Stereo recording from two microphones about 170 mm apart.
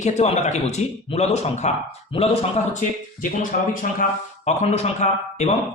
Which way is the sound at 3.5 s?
60° left (ahead or behind).